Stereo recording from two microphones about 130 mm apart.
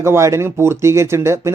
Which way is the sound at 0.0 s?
20° right (ahead or behind).